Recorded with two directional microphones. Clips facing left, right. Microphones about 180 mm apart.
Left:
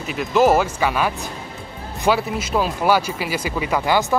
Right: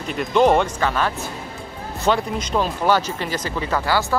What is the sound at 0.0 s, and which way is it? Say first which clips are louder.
Speech: even; 5° left (ahead or behind).